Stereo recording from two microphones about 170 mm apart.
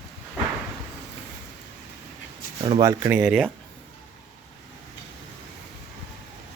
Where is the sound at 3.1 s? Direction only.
5° right (ahead or behind).